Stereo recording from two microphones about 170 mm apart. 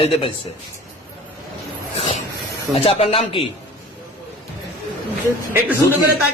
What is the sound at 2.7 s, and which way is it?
Speech, 35° left (ahead or behind).